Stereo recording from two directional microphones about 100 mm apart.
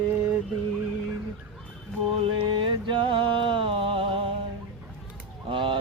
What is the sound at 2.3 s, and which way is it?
Music, 55° right (ahead or behind).